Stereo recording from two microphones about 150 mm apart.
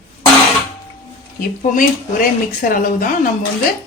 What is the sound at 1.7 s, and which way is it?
Speech, 65° left (ahead or behind).